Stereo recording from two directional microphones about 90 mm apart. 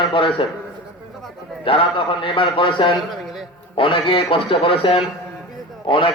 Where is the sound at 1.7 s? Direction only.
80° left.